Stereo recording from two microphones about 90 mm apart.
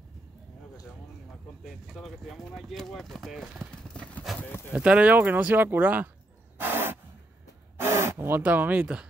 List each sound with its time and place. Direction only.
1.6 s speech: centre (ahead or behind)
3.7 s clip-clop: 10° left (ahead or behind)
4.4 s speech: 25° left (ahead or behind)
4.7 s speech: 15° right (ahead or behind)
6.6 s a sound: 25° right (ahead or behind)
7.8 s gasp: 30° right (ahead or behind)
8.4 s speech: 20° right (ahead or behind)